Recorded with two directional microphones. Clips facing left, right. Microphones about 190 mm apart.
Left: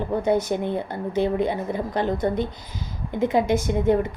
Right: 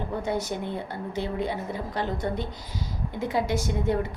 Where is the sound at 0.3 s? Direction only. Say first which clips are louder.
Left 8 dB; 20° left (ahead or behind).